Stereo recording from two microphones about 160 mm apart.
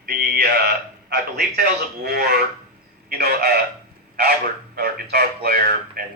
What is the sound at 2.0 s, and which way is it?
A man's voice, 80° right.